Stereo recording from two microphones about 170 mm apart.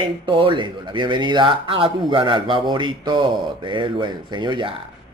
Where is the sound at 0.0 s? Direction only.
30° right (ahead or behind).